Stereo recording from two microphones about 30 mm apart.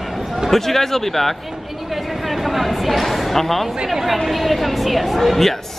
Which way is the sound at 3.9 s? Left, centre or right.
Centre.